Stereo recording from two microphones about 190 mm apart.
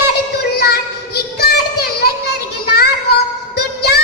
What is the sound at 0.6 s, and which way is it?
Child singing, 55° left (ahead or behind).